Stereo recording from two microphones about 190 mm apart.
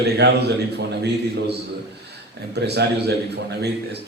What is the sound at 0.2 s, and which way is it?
A man's voice, 60° right (ahead or behind).